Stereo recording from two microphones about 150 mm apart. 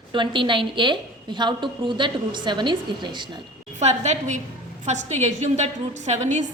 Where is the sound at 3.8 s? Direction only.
50° right (ahead or behind).